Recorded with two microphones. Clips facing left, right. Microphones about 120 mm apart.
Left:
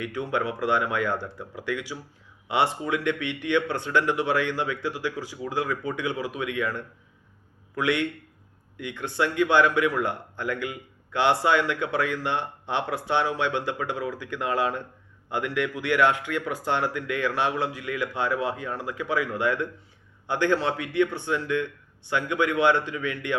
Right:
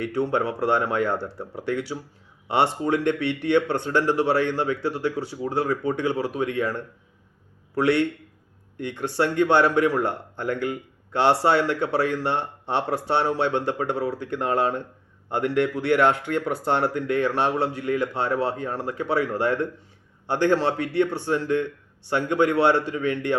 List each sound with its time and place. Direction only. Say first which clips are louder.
0.0 s speech: right 4 dB; 35° right (ahead or behind)